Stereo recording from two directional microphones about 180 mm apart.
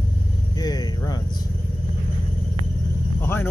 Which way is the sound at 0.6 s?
20° left (ahead or behind).